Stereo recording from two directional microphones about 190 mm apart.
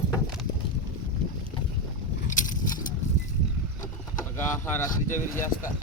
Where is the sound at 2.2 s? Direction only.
45° left (ahead or behind).